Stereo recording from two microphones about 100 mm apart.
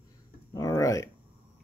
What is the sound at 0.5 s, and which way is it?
Speech, 35° left (ahead or behind).